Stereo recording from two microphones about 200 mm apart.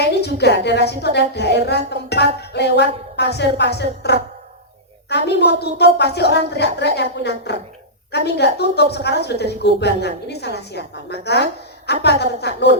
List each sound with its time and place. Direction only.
0.0 s a woman's voice: 55° left (ahead or behind)